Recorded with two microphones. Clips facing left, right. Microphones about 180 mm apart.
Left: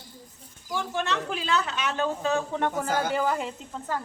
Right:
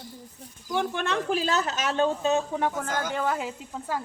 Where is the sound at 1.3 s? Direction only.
40° right (ahead or behind).